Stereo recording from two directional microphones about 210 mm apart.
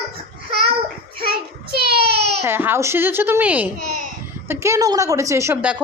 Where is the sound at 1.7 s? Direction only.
50° right (ahead or behind).